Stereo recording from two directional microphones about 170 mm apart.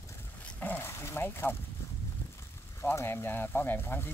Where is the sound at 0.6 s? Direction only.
10° left (ahead or behind).